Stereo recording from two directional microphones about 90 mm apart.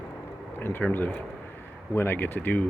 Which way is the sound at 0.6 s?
25° left (ahead or behind).